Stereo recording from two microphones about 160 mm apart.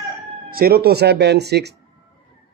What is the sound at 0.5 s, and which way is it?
Speech, 70° right (ahead or behind).